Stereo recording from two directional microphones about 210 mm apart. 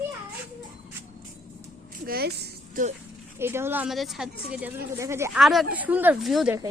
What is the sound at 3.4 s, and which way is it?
Speech, 10° right (ahead or behind).